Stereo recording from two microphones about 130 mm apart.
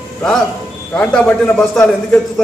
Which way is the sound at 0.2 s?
5° left (ahead or behind).